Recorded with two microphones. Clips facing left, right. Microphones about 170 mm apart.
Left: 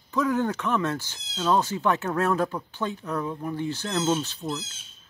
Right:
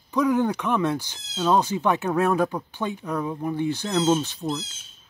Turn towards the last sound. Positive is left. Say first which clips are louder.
# right 3 dB
turn(degrees=-15)  # may be behind; listen again after turning